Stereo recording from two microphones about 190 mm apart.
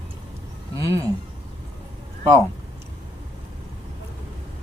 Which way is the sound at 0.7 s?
15° right (ahead or behind).